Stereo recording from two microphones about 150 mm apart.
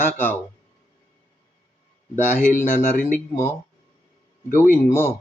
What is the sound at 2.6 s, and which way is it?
Speech, 60° left (ahead or behind).